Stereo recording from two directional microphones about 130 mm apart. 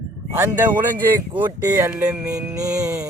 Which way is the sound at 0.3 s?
15° right (ahead or behind).